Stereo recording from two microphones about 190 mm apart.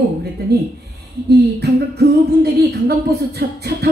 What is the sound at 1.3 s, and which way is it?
Music, 60° right (ahead or behind).